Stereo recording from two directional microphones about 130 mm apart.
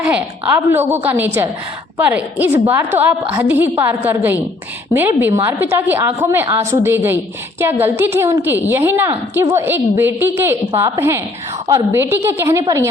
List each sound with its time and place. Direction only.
0.0 s a woman's voice: 10° right (ahead or behind)